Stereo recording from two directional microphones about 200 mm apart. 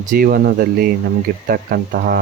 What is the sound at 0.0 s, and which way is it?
Speech, 45° right (ahead or behind).